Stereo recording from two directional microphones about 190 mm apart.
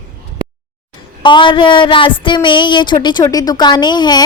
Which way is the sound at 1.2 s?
25° left (ahead or behind).